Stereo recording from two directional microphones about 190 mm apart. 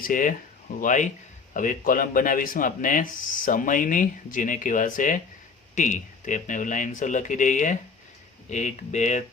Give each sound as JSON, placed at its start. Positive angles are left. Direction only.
{"t": 0.0, "sound": "speech", "side_deg": 45}